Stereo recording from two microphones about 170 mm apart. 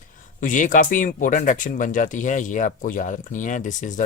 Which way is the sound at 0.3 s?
50° left (ahead or behind).